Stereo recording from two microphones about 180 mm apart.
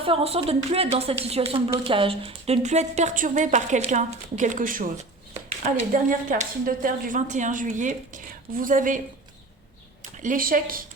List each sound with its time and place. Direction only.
0.0 s a woman's voice: 30° right (ahead or behind); by 9.0 s 50° right (ahead or behind)
10.0 s speech: 50° right (ahead or behind)